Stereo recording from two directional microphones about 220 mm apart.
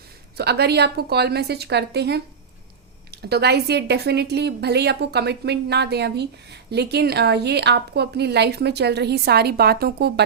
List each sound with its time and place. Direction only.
0.3 s a woman's voice: 50° right (ahead or behind)